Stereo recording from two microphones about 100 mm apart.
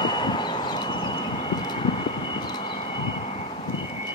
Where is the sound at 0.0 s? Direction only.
50° left (ahead or behind).